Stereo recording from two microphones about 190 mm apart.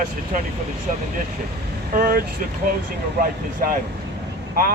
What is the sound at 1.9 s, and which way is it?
Speech, 50° right (ahead or behind).